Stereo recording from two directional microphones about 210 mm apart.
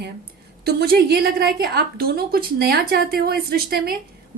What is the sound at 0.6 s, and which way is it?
Speech, 50° right (ahead or behind).